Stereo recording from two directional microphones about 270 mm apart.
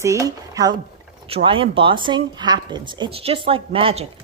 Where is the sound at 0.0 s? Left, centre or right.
Centre.